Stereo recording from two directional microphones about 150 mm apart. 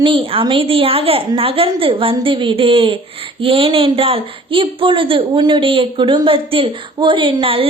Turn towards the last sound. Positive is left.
turn(degrees=-35)  # may be behind; listen again after turning